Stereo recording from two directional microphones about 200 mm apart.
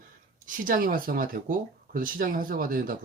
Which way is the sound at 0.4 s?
45° right (ahead or behind).